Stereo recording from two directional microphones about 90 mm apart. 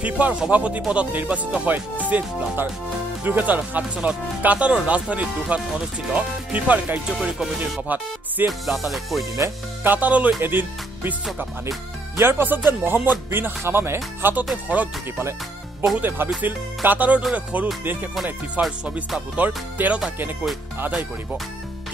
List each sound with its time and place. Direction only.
0.0 s speech: 15° right (ahead or behind)
7.1 s music: 5° right (ahead or behind)
7.5 s speech: 10° right (ahead or behind)
8.5 s music: centre (ahead or behind)
9.8 s speech: 20° right (ahead or behind)
12.2 s speech: 25° right (ahead or behind)
18.1 s music: 5° right (ahead or behind)
19.3 s speech: 15° right (ahead or behind)